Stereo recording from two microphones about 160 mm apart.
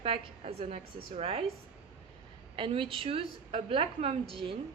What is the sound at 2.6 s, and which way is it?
A woman's voice, 30° right (ahead or behind).